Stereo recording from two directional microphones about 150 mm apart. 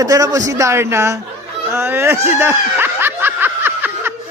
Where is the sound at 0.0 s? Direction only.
25° right (ahead or behind).